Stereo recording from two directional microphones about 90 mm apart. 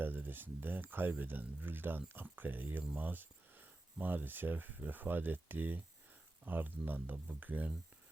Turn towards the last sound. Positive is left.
turn(degrees=-20)  # may be behind; listen again after turning